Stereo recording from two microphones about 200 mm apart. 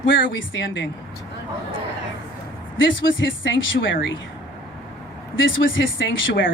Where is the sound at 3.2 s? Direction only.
70° left (ahead or behind).